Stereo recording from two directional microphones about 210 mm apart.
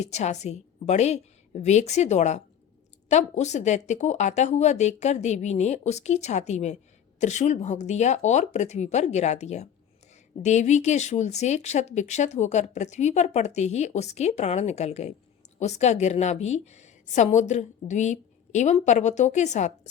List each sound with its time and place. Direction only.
0.0 s speech: 35° left (ahead or behind)